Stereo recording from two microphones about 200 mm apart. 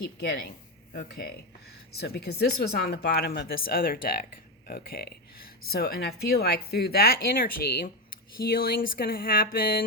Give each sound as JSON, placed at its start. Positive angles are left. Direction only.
{"t": 0.2, "sound": "speech", "side_deg": 55}